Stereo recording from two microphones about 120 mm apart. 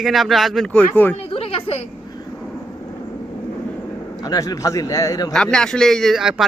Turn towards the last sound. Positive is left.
turn(degrees=-5)  # may be behind; listen again after turning